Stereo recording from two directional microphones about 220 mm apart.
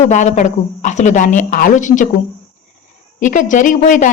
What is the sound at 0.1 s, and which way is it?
Speech, 35° left (ahead or behind).